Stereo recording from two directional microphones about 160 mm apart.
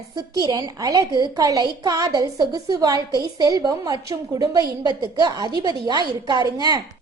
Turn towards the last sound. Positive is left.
turn(degrees=-25)  # may be behind; listen again after turning